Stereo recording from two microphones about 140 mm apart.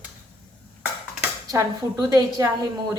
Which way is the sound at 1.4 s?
25° right (ahead or behind).